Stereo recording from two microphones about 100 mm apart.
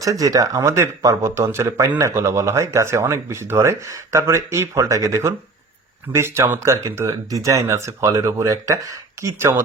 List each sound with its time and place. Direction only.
0.0 s speech: 35° right (ahead or behind)